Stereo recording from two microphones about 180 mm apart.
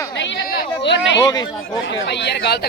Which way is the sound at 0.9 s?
80° left.